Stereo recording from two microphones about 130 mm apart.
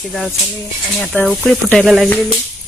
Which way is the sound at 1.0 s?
Centre (ahead or behind).